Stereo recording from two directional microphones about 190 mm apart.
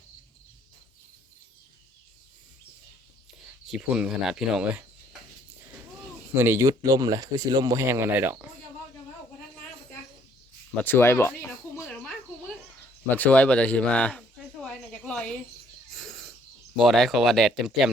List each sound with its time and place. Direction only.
3.7 s speech: 5° right (ahead or behind)
6.3 s speech: 15° right (ahead or behind)
10.8 s a sound: 10° left (ahead or behind)
16.7 s speech: centre (ahead or behind)